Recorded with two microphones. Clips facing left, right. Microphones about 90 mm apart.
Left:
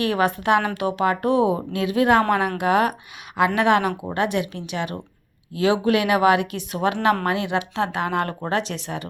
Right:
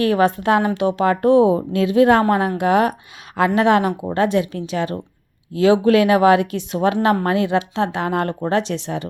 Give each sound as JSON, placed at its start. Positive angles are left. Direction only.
{"t": 0.1, "sound": "a woman's voice", "side_deg": -30}